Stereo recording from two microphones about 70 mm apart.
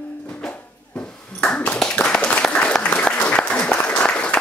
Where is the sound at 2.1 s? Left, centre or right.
Centre.